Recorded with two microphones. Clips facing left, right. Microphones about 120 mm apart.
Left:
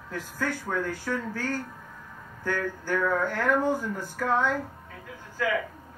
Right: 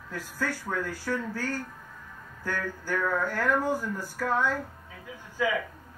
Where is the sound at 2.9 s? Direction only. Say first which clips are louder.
Left 2 dB; 15° left (ahead or behind).